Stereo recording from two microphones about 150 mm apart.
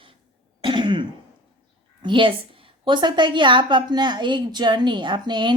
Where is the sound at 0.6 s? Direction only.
35° right (ahead or behind).